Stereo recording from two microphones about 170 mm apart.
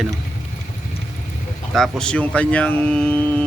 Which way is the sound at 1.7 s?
5° left (ahead or behind).